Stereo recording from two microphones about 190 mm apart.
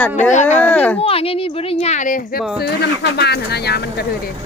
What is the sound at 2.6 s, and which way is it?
Speech, 60° left (ahead or behind).